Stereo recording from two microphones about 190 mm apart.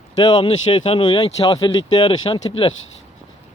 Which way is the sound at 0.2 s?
25° left (ahead or behind).